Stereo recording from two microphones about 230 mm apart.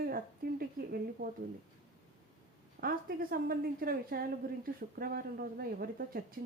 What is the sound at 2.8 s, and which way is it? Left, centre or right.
Speech, right.